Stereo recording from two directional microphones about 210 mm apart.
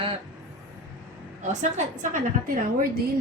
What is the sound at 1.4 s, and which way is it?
A woman's voice, 35° right (ahead or behind).